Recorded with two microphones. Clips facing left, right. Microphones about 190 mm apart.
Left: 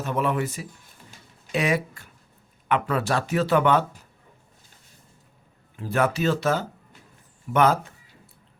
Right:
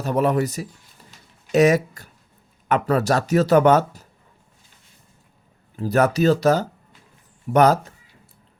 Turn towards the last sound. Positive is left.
turn(degrees=-40)  # may be behind; listen again after turning